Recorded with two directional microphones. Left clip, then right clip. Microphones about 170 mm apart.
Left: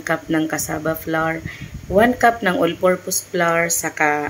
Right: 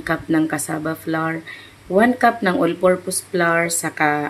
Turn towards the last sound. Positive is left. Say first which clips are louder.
# left 1 dB
turn(degrees=-5)  # may be behind; listen again after turning